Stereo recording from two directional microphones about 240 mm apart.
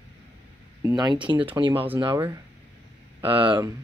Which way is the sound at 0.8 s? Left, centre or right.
Centre.